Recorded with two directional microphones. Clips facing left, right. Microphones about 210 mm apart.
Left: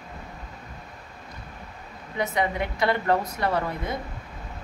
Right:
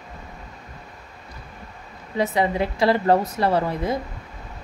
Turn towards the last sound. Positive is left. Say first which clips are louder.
# right 5 dB
turn(degrees=-30)  # may be behind; listen again after turning